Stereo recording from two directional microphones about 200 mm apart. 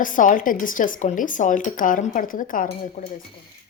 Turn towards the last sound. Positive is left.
turn(degrees=40)  # may be behind; listen again after turning